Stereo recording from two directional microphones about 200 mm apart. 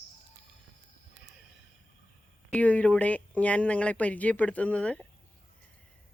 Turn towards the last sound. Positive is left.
turn(degrees=5)  # may be behind; listen again after turning